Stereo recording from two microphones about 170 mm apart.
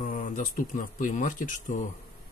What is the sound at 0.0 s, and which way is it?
Speech, 50° left (ahead or behind).